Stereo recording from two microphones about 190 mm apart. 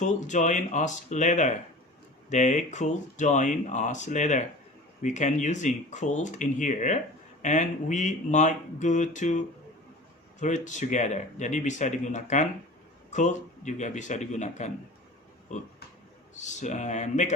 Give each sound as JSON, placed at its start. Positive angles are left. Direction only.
{"t": 0.0, "sound": "speech", "side_deg": 40}
{"t": 10.4, "sound": "speech", "side_deg": 40}
{"t": 16.3, "sound": "speech", "side_deg": 40}